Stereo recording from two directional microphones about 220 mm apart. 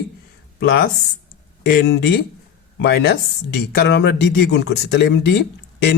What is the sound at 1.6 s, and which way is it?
Speech, 50° left (ahead or behind).